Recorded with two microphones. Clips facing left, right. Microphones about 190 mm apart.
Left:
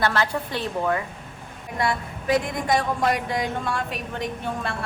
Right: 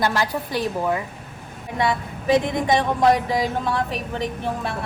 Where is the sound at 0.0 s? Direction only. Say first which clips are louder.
Right 1 dB; 10° right (ahead or behind).